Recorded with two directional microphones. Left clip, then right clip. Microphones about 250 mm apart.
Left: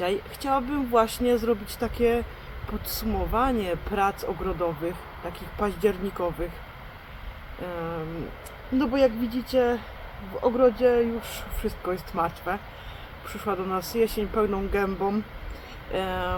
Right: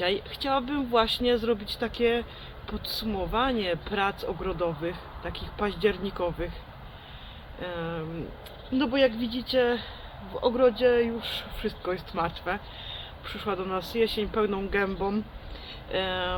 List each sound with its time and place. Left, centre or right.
0.0 s speech: centre
7.6 s speech: centre